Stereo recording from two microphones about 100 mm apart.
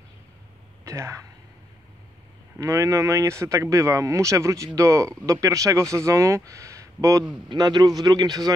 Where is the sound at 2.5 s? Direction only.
30° right (ahead or behind).